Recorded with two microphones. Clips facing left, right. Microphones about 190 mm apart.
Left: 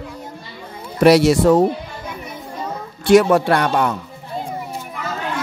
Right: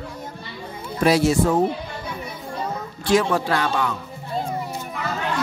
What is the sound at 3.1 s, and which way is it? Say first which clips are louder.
Speech: left 7 dB; 65° left (ahead or behind).